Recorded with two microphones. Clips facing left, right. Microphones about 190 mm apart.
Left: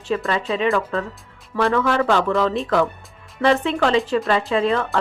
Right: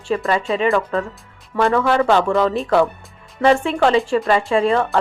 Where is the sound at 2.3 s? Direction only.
5° right (ahead or behind).